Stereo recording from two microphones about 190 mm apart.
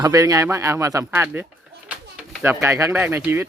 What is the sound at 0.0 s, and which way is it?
Speech, 15° right (ahead or behind).